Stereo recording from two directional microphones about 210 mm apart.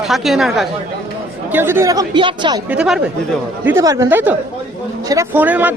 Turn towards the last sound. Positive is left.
turn(degrees=-10)  # may be behind; listen again after turning